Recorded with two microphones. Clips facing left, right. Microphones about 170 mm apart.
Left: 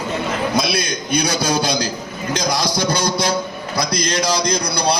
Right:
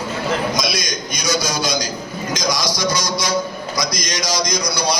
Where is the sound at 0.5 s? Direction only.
60° left (ahead or behind).